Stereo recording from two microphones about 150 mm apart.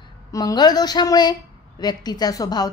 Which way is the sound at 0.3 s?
25° left (ahead or behind).